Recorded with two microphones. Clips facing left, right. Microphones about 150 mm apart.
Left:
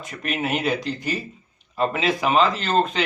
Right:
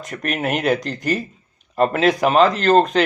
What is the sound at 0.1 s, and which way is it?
Speech, 50° right (ahead or behind).